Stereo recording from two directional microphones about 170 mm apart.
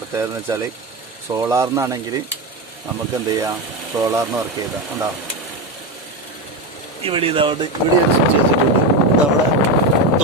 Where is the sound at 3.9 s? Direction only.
20° right (ahead or behind).